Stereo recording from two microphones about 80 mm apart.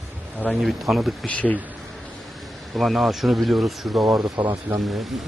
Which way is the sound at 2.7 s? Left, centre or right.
Centre.